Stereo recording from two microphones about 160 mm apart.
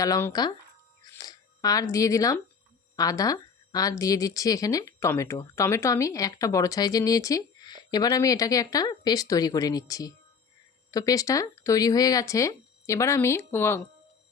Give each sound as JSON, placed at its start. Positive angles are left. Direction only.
{"t": 0.0, "sound": "speech", "side_deg": 20}